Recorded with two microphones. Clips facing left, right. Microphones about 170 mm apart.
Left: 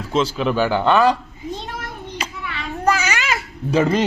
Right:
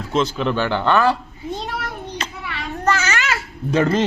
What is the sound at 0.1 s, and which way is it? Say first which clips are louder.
Speech: left 1 dB; 5° left (ahead or behind).